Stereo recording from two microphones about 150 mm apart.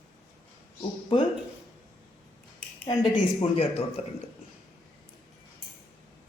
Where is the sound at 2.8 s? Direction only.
30° left (ahead or behind).